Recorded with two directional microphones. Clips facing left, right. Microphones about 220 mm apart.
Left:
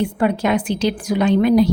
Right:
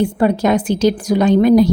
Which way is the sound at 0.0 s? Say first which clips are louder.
Right 4 dB; 40° right (ahead or behind).